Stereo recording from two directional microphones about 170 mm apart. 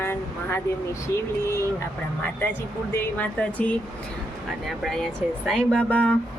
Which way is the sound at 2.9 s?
10° left (ahead or behind).